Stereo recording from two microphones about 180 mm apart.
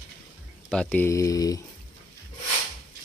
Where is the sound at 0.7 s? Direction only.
5° left (ahead or behind).